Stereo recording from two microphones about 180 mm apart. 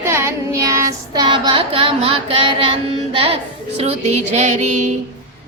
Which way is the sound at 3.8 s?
40° right (ahead or behind).